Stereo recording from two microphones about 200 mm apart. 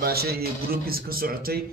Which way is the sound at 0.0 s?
50° right (ahead or behind).